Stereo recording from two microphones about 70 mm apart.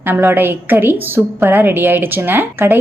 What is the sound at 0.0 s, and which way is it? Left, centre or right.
Speech, right.